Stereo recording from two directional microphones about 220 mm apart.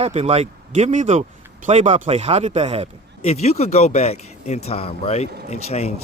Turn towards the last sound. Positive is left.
turn(degrees=30)  # may be behind; listen again after turning